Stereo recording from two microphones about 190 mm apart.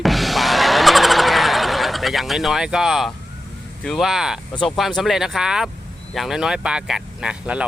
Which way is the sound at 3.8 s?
Centre (ahead or behind).